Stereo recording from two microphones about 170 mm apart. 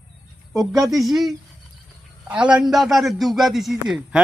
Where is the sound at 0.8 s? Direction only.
Centre (ahead or behind).